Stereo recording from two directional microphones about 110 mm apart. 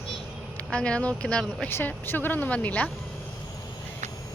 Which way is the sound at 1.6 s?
20° left (ahead or behind).